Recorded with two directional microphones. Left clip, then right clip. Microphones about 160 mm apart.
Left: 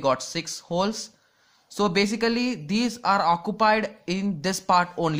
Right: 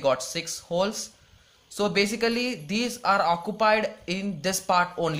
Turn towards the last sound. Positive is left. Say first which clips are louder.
# left 2 dB
turn(degrees=35)  # may be behind; listen again after turning